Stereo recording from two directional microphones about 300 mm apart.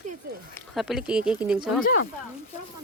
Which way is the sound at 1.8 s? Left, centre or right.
Left.